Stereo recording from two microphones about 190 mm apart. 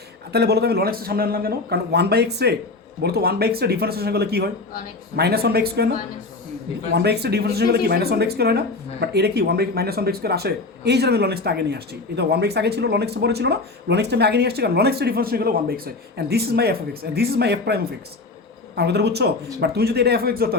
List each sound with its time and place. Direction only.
0.3 s speech: 60° right (ahead or behind)
6.9 s speech: 60° right (ahead or behind)
18.8 s speech: 60° right (ahead or behind)